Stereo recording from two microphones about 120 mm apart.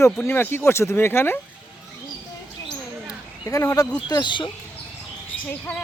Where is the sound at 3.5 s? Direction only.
30° left (ahead or behind).